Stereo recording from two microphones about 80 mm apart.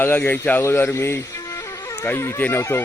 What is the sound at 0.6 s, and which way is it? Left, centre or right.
Speech, left.